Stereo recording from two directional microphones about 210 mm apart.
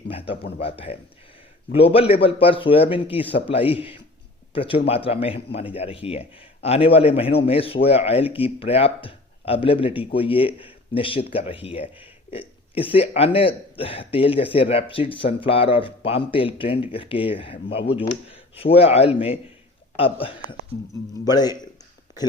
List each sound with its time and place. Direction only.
0.1 s speech: 25° left (ahead or behind)